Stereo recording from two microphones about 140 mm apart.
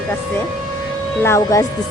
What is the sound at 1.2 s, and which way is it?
Speech, 20° left (ahead or behind).